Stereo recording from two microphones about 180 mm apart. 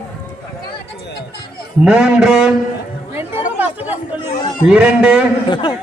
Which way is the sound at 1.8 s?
5° right (ahead or behind).